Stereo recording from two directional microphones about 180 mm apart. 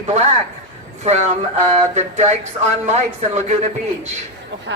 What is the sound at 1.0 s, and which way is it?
A woman's voice, 40° right (ahead or behind).